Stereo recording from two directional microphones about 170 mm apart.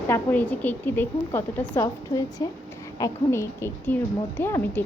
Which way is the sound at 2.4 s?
25° left (ahead or behind).